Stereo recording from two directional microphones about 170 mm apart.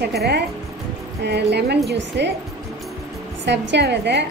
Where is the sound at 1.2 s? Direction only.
80° right.